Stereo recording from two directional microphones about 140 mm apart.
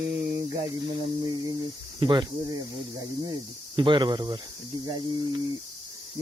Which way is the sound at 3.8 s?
35° right (ahead or behind).